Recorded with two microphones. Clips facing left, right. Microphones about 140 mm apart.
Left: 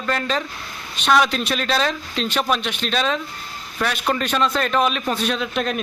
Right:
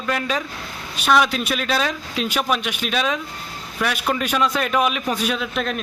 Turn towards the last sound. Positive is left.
turn(degrees=0)  # may be behind; listen again after turning